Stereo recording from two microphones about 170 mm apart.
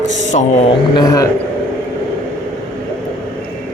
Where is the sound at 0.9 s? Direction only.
20° left (ahead or behind).